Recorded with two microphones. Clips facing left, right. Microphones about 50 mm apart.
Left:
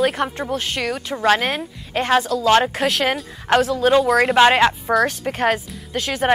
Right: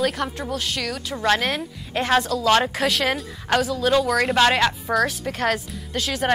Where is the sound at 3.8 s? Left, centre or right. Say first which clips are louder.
Left 4 dB; left.